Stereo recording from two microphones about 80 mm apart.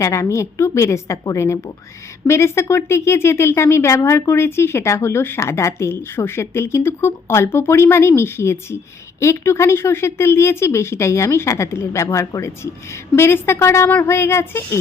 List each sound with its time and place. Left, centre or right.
0.0 s speech: left